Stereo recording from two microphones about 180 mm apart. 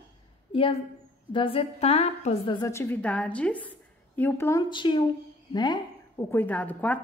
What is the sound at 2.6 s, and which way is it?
A woman's voice, 15° left (ahead or behind).